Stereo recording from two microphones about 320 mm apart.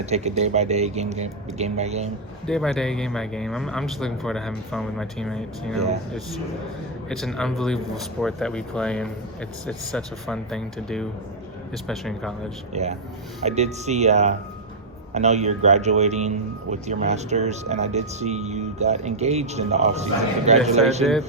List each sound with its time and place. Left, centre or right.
0.0 s speech: centre
2.5 s speech: centre
7.1 s speech: centre
12.7 s speech: right
21.0 s speech: centre